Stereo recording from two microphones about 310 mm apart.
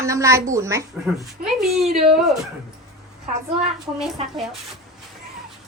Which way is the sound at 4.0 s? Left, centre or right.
Centre.